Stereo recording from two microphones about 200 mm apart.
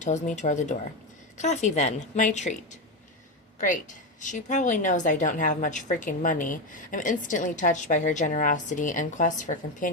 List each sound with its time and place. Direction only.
0.0 s a woman's voice: 35° left (ahead or behind)